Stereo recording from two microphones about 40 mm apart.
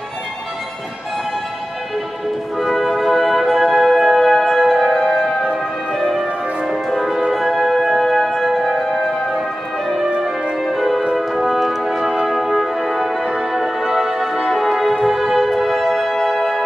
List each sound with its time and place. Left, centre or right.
2.6 s music: centre
7.1 s music: centre
10.0 s music: right
10.6 s music: centre
13.5 s brass instrument: centre